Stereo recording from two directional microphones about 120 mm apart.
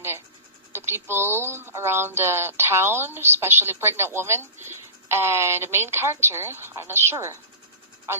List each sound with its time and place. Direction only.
0.7 s speech: 20° right (ahead or behind)